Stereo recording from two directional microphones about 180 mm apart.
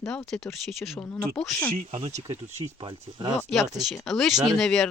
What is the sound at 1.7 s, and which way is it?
Speech, 40° right (ahead or behind).